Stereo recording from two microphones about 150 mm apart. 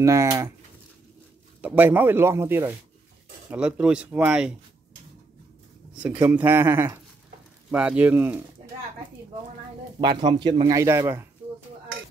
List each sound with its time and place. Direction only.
0.0 s a man's voice: 20° right (ahead or behind)
1.6 s speech: 10° right (ahead or behind)
5.9 s speech: 15° right (ahead or behind)
9.9 s a man's voice: 30° right (ahead or behind)
10.8 s speech: 20° right (ahead or behind)